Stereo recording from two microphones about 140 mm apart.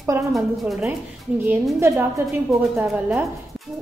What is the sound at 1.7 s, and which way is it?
A woman's voice, 20° right (ahead or behind).